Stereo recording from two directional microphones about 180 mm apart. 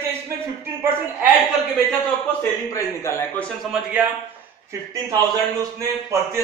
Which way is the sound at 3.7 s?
5° right (ahead or behind).